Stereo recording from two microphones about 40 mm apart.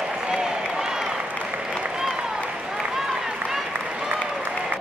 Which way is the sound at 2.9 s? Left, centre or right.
Centre.